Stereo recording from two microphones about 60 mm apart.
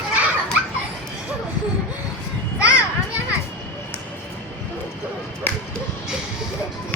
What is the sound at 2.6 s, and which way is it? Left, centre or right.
Children playing, right.